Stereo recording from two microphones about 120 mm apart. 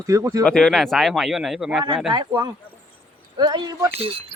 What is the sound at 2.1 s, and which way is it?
Speech, 40° right (ahead or behind).